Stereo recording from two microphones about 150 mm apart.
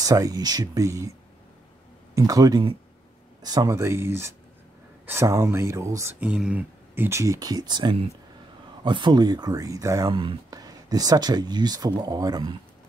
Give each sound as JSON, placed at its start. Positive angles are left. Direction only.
{"t": 0.0, "sound": "speech", "side_deg": -25}
{"t": 2.1, "sound": "speech", "side_deg": -25}
{"t": 6.1, "sound": "speech", "side_deg": -5}